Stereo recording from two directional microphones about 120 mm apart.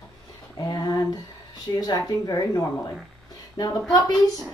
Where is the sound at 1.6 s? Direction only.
35° left (ahead or behind).